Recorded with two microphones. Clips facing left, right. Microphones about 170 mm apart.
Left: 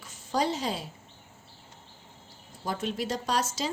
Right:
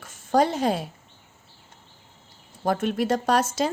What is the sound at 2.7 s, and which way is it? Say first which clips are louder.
Speech: right 8 dB; 55° right (ahead or behind).